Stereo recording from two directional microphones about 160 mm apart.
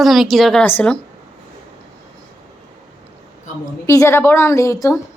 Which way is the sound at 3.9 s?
15° left (ahead or behind).